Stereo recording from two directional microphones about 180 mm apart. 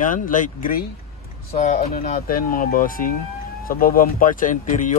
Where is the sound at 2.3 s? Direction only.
55° left (ahead or behind).